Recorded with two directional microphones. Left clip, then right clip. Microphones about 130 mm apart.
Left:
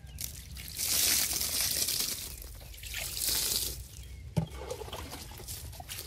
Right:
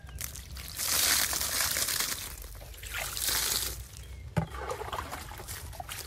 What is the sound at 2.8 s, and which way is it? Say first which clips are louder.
Boat: right 3 dB; 20° right (ahead or behind).